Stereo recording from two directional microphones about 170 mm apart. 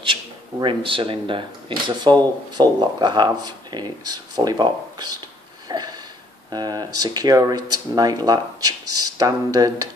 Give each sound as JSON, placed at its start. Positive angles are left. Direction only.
{"t": 0.0, "sound": "speech", "side_deg": -30}
{"t": 5.7, "sound": "sniff", "side_deg": -25}
{"t": 6.5, "sound": "speech", "side_deg": -25}